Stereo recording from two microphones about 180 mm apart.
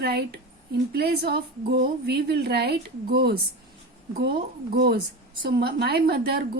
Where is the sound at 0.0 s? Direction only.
65° right (ahead or behind).